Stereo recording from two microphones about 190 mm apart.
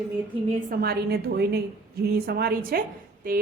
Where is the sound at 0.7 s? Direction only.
55° right (ahead or behind).